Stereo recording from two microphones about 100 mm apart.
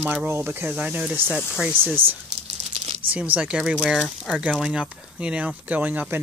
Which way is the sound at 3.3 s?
10° right (ahead or behind).